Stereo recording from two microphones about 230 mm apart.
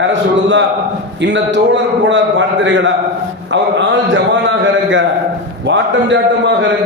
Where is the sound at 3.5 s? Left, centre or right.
Right.